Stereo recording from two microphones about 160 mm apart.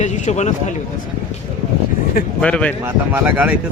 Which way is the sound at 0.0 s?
45° left (ahead or behind).